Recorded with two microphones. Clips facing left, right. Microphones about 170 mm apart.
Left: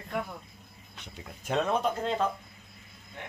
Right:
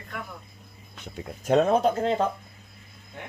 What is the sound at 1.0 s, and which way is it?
Speech, 45° right (ahead or behind).